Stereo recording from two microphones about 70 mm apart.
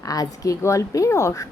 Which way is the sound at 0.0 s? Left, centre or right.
Left.